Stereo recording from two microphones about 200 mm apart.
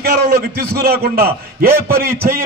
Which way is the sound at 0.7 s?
50° right (ahead or behind).